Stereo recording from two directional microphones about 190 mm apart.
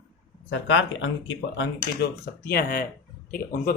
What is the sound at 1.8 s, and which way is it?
Speech, 55° left (ahead or behind).